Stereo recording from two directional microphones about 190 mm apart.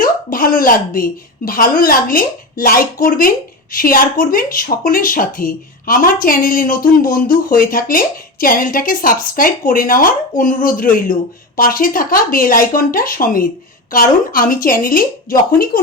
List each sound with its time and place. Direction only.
0.0 s a woman's voice: 45° left (ahead or behind)